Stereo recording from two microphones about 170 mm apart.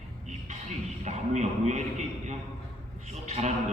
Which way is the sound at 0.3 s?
45° right (ahead or behind).